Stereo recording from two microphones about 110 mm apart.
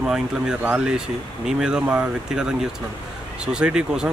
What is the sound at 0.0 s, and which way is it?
Speech, 5° right (ahead or behind).